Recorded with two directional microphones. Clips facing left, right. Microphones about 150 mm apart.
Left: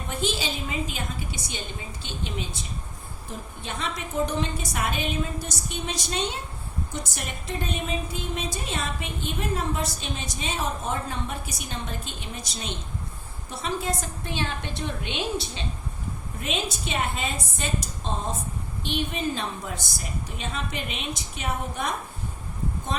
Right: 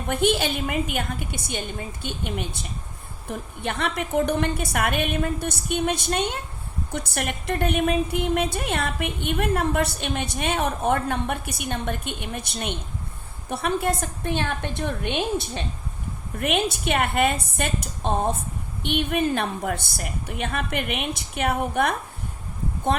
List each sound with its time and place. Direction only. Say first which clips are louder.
0.1 s a woman's voice: right 7 dB; 60° right (ahead or behind)